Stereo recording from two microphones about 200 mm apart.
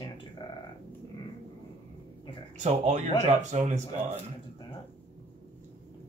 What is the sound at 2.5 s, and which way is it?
Speech, 35° right (ahead or behind).